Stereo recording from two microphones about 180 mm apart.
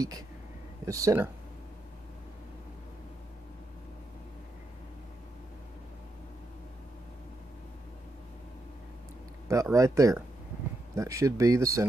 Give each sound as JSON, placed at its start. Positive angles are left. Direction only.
{"t": 0.8, "sound": "speech", "side_deg": -20}
{"t": 9.5, "sound": "speech", "side_deg": -15}